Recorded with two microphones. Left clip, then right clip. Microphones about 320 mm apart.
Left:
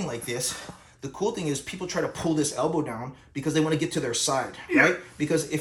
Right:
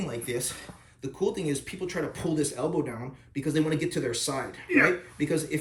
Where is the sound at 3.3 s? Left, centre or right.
Centre.